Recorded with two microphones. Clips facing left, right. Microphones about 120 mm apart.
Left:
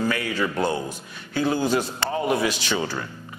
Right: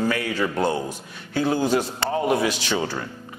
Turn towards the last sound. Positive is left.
turn(degrees=-35)  # may be behind; listen again after turning